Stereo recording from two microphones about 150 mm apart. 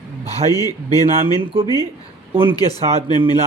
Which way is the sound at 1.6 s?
25° left (ahead or behind).